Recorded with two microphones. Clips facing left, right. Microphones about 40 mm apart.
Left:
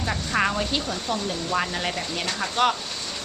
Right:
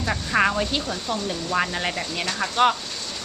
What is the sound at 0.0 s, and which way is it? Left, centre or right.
Speech, centre.